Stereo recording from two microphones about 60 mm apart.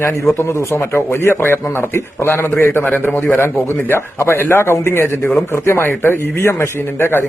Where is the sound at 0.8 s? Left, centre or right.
Left.